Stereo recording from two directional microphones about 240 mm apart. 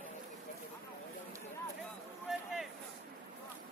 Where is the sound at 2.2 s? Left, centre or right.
Centre.